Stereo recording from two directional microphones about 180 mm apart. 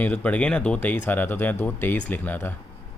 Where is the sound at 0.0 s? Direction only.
10° left (ahead or behind).